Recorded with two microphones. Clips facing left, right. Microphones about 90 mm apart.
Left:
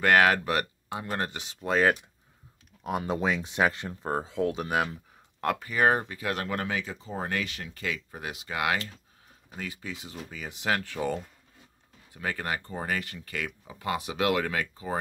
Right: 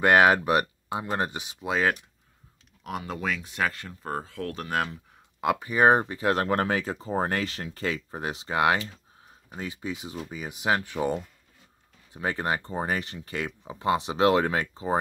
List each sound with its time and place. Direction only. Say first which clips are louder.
0.0 s speech: right 3 dB; 20° right (ahead or behind); by 2.0 s 5° right (ahead or behind)
3.1 s speech: left 3 dB; 20° left (ahead or behind)
5.6 s speech: right 5 dB; 20° right (ahead or behind)